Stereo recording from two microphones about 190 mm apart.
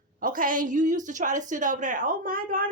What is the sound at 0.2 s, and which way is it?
A woman's voice, 45° right (ahead or behind).